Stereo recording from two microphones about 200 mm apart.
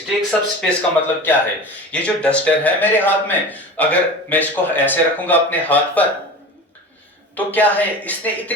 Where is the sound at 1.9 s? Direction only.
5° left (ahead or behind).